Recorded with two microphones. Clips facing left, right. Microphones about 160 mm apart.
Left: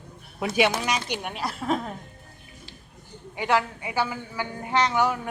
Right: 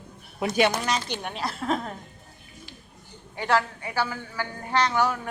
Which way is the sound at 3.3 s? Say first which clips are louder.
Even; 15° left (ahead or behind).